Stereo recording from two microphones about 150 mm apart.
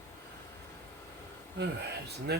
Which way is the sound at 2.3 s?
90° right.